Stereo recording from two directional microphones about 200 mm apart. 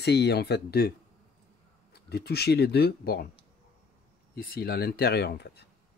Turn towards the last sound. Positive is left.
turn(degrees=55)  # may be behind; listen again after turning